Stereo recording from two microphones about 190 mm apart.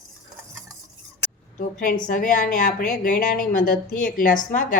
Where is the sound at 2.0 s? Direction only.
45° left (ahead or behind).